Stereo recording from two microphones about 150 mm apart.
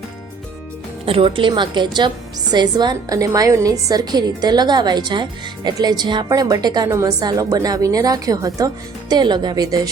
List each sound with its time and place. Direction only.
1.0 s a woman's voice: 40° right (ahead or behind)